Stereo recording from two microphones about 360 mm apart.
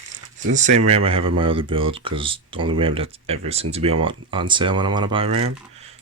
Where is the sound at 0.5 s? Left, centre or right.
Centre.